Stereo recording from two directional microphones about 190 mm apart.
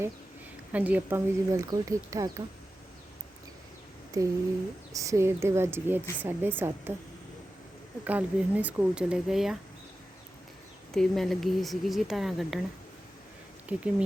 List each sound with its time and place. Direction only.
0.7 s a woman's voice: 10° right (ahead or behind)
4.1 s a woman's voice: 20° right (ahead or behind)
8.0 s speech: 10° right (ahead or behind)
10.9 s speech: centre (ahead or behind)
13.7 s speech: 5° right (ahead or behind)